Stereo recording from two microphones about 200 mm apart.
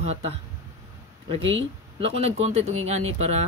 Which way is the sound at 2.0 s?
30° right (ahead or behind).